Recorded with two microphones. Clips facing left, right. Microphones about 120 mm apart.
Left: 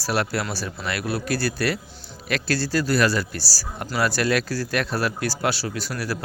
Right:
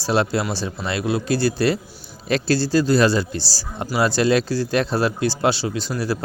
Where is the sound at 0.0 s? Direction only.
25° right (ahead or behind).